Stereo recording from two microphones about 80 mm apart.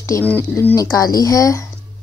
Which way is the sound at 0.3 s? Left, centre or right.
Left.